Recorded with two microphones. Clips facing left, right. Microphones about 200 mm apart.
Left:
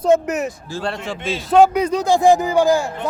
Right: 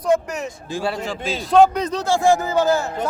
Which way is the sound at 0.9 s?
Centre (ahead or behind).